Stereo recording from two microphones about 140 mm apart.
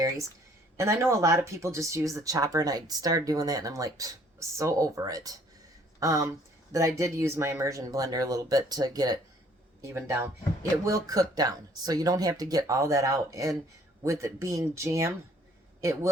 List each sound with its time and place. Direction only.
0.8 s speech: 20° right (ahead or behind)